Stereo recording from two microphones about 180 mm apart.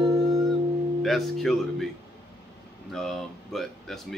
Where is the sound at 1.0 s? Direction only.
Centre (ahead or behind).